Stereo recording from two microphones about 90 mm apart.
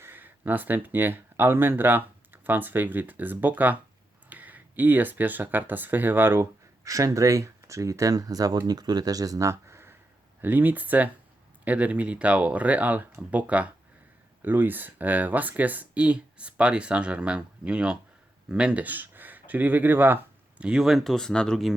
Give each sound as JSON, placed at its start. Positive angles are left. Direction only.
{"t": 0.0, "sound": "speech", "side_deg": -25}
{"t": 6.8, "sound": "speech", "side_deg": -35}
{"t": 20.7, "sound": "speech", "side_deg": -5}